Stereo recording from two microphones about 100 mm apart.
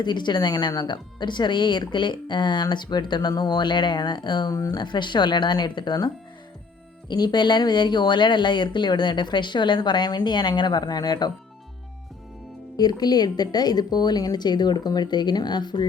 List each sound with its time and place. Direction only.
0.0 s speech: 50° left (ahead or behind)
4.8 s speech: 50° left (ahead or behind)
7.1 s speech: 45° left (ahead or behind)
12.7 s speech: 40° left (ahead or behind)